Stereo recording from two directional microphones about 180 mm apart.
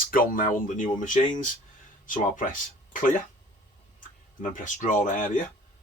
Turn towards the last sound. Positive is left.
turn(degrees=45)  # may be behind; listen again after turning